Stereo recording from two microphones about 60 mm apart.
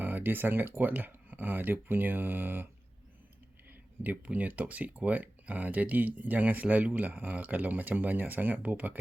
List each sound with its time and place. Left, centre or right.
0.0 s speech: right
4.0 s speech: right